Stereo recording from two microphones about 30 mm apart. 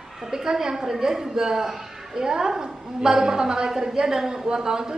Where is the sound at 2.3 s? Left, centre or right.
Right.